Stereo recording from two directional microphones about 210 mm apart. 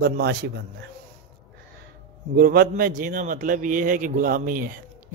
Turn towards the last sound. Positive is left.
turn(degrees=-40)  # may be behind; listen again after turning